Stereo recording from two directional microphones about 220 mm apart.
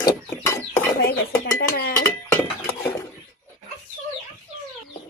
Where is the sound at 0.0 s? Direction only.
15° left (ahead or behind).